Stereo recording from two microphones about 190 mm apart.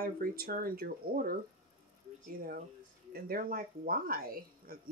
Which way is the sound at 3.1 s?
50° right (ahead or behind).